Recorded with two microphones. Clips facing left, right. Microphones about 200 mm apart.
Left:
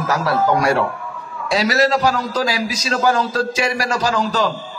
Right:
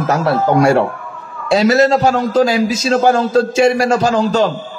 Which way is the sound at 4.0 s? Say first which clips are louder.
Right 5 dB; 55° right (ahead or behind).